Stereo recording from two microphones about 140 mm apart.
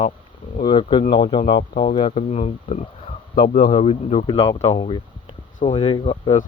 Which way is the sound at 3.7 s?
45° left (ahead or behind).